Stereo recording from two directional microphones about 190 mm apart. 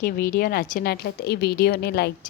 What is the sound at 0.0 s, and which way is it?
A woman's voice, 50° left (ahead or behind).